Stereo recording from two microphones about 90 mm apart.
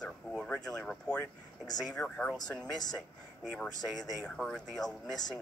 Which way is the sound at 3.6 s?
45° left (ahead or behind).